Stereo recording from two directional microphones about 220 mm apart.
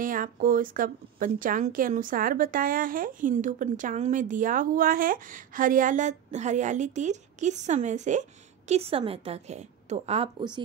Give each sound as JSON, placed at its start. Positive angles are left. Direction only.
{"t": 0.0, "sound": "speech", "side_deg": -40}